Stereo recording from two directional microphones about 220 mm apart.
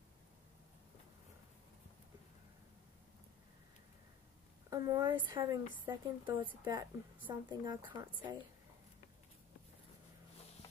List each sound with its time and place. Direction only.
4.6 s a woman's voice: 15° right (ahead or behind)